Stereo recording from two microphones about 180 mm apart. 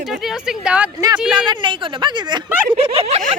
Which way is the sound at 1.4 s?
25° right (ahead or behind).